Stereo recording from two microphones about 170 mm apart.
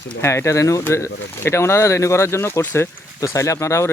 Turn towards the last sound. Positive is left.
turn(degrees=15)  # may be behind; listen again after turning